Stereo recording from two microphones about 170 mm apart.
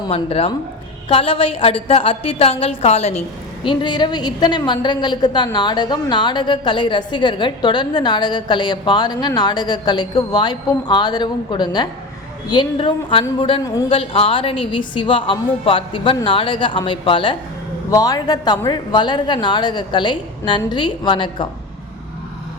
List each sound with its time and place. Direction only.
0.0 s a woman's voice: 35° left (ahead or behind)